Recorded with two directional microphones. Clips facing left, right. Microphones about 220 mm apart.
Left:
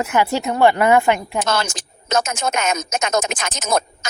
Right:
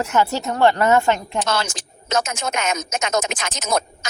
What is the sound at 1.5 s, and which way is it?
Speech, 50° left (ahead or behind).